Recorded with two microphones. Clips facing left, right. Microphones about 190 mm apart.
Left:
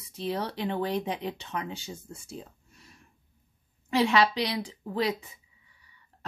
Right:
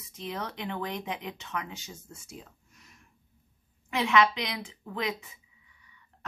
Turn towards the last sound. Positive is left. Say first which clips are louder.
# left 5 dB
turn(degrees=35)  # may be behind; listen again after turning